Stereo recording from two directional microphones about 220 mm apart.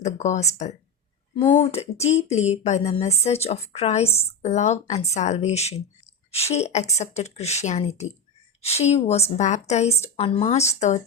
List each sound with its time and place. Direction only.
0.0 s a woman's voice: 30° left (ahead or behind)